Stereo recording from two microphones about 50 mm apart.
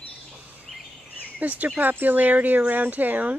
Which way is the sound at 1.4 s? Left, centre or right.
Right.